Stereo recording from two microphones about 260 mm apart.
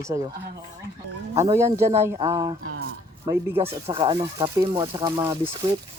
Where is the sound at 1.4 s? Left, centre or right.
Centre.